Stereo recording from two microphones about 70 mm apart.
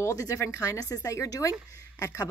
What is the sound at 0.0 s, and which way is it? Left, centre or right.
Speech, left.